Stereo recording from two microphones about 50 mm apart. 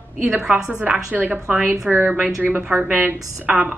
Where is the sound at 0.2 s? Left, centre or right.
Centre.